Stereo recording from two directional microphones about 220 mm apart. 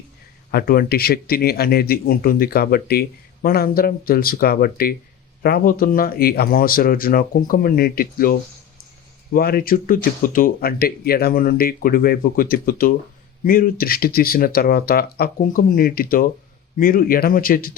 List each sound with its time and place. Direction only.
0.5 s speech: 40° left (ahead or behind)